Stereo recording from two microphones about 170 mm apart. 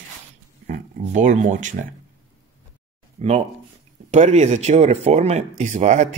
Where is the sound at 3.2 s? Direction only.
40° right (ahead or behind).